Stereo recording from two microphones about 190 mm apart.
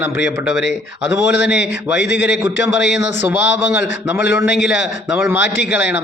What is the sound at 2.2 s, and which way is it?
Speech, 10° right (ahead or behind).